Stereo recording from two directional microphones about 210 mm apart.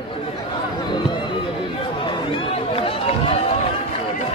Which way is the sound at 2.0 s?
25° left (ahead or behind).